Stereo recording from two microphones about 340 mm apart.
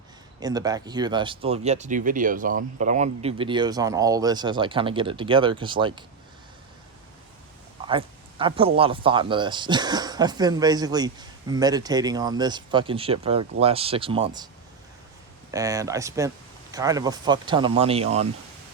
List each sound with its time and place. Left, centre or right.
0.3 s speech: centre
7.9 s speech: centre
15.5 s speech: centre